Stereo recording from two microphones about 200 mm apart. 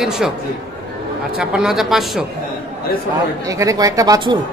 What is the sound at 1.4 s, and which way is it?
Speech, 5° right (ahead or behind).